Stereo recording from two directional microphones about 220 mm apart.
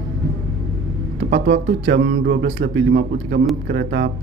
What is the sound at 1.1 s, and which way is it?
Speech, 55° right (ahead or behind).